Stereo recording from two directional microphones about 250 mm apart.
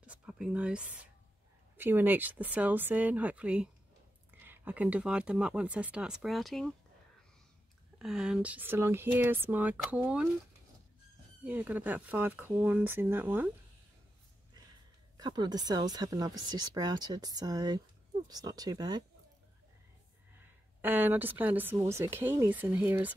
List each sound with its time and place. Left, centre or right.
0.0 s a sound: centre
1.8 s speech: centre
8.0 s speech: centre
11.4 s speech: centre
15.1 s speech: centre
20.3 s speech: centre